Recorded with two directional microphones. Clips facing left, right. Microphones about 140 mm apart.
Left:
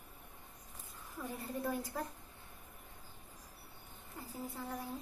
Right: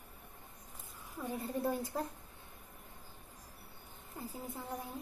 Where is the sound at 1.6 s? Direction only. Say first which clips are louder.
Right 2 dB; 25° right (ahead or behind).